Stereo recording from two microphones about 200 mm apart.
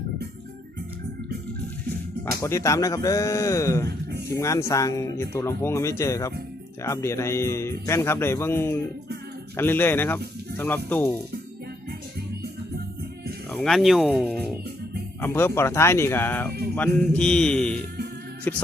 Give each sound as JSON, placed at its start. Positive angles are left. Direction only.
{"t": 2.2, "sound": "speech", "side_deg": 15}
{"t": 13.5, "sound": "mantra", "side_deg": 0}
{"t": 15.2, "sound": "speech", "side_deg": 10}
{"t": 16.7, "sound": "mantra", "side_deg": 5}
{"t": 18.5, "sound": "speech", "side_deg": 10}